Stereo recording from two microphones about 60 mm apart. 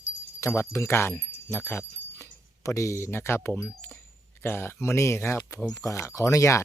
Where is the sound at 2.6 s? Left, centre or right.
Left.